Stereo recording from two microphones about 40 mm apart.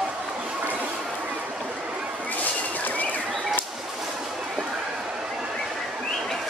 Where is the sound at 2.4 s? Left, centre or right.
Left.